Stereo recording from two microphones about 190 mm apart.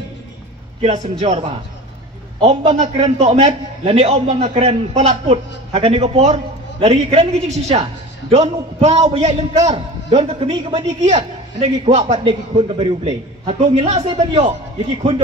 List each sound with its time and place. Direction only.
0.8 s a man's voice: 35° right (ahead or behind)
2.8 s a man's voice: 35° right (ahead or behind)